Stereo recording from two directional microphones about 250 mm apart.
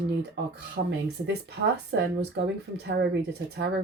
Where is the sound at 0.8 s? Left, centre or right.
Right.